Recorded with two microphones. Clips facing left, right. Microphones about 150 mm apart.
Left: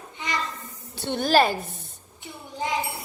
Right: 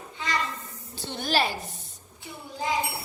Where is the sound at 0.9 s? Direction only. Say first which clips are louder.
Left 7 dB; 60° left (ahead or behind).